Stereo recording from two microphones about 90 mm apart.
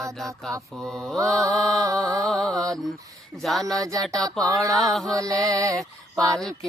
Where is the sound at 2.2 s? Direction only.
Centre (ahead or behind).